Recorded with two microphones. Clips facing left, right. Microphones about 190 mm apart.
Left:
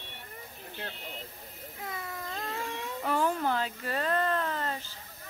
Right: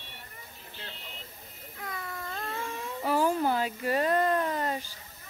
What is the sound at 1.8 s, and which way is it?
Baby cry, 25° left (ahead or behind).